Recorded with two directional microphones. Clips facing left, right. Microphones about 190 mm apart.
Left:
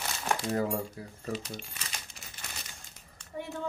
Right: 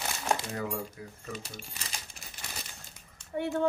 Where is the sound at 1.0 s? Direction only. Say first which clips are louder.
Left 1 dB; 35° left (ahead or behind).